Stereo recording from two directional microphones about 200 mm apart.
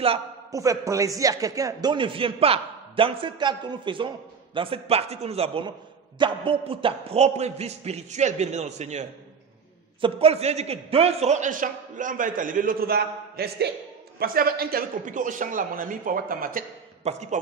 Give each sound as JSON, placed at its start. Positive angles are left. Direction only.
{"t": 0.5, "sound": "a man's voice", "side_deg": -15}
{"t": 10.0, "sound": "a man's voice", "side_deg": -30}